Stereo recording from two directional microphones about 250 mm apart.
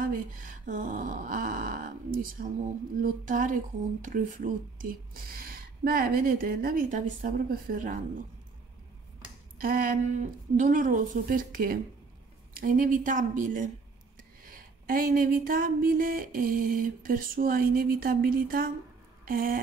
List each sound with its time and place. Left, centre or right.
0.0 s speech: right
9.6 s speech: right
19.2 s a sound: right